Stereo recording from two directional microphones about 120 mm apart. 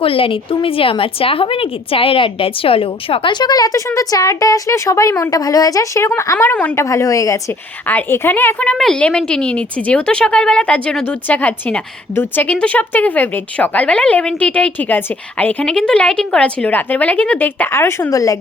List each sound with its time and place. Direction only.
0.0 s a woman's voice: 50° left (ahead or behind); by 6.7 s 15° left (ahead or behind)
6.7 s a woman's voice: 25° left (ahead or behind)
7.9 s a woman's voice: 15° left (ahead or behind)